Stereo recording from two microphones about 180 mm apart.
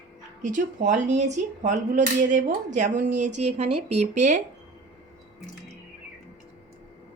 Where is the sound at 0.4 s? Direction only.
45° right (ahead or behind).